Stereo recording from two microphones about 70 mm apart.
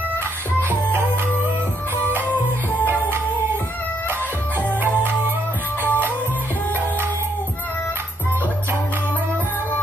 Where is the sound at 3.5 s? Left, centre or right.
Left.